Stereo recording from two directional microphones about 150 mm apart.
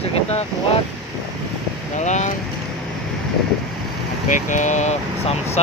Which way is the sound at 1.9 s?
50° left (ahead or behind).